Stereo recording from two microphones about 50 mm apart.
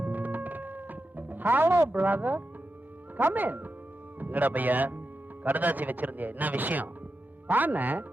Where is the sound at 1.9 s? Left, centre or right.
Right.